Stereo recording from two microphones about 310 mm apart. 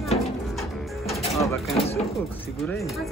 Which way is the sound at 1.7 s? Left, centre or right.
Centre.